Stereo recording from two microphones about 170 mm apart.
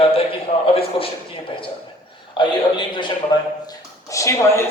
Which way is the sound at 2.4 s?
30° left (ahead or behind).